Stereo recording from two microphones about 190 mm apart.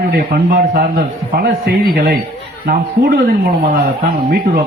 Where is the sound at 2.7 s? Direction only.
55° right (ahead or behind).